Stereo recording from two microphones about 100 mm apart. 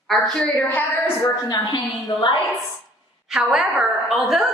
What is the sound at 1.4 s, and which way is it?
Speech, 45° left (ahead or behind).